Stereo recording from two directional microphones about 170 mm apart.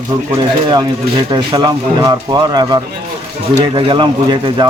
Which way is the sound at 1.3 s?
25° right (ahead or behind).